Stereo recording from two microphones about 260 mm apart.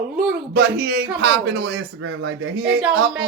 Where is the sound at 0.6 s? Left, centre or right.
Right.